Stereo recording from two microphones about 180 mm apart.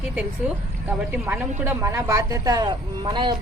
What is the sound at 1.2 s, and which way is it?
Speech, 10° right (ahead or behind).